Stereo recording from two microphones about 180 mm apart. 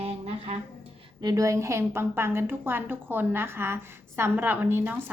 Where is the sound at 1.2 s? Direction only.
20° right (ahead or behind).